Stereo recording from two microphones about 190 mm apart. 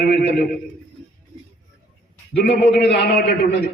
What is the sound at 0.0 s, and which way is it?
Speech, 55° left (ahead or behind).